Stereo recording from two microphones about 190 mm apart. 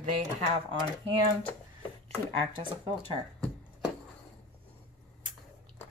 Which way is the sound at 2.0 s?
25° right (ahead or behind).